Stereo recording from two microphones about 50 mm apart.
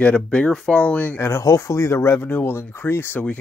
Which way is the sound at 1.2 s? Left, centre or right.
Left.